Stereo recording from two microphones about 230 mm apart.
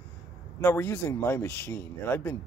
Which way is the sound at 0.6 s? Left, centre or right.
Centre.